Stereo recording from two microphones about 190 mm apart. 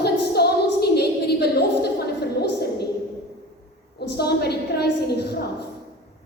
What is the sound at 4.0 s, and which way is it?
A woman's voice, 60° left (ahead or behind).